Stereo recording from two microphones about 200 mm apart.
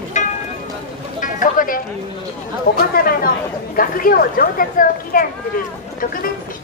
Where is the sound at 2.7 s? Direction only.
45° left (ahead or behind).